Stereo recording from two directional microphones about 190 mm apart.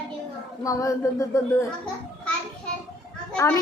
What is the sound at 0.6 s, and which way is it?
A woman's voice, 15° left (ahead or behind).